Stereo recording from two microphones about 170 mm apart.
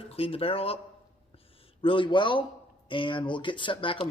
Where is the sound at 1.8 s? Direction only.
30° left (ahead or behind).